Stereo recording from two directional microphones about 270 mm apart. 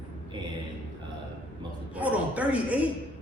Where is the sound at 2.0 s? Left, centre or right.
Centre.